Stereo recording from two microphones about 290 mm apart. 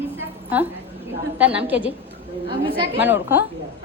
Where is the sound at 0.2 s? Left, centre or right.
Centre.